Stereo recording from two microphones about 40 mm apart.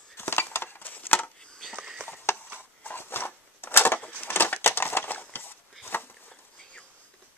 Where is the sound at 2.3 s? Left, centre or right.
Left.